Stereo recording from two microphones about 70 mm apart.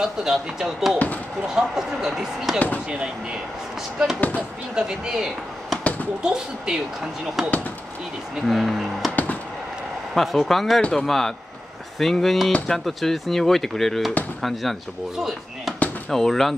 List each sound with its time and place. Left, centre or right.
0.0 s speech: centre
0.9 s speech: left
1.5 s speech: centre
4.2 s speech: left
4.7 s speech: centre
8.4 s speech: centre
9.1 s music: left
10.1 s speech: centre